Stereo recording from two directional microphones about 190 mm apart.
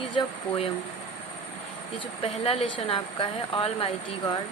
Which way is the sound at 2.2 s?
30° left (ahead or behind).